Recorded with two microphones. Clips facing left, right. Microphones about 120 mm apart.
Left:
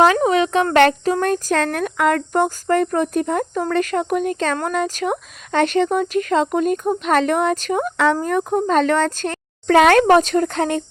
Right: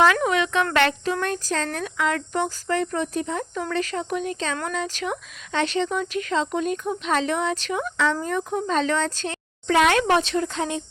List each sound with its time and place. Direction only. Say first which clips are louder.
0.0 s speech: left 5 dB; 35° left (ahead or behind); by 10.8 s 60° left (ahead or behind)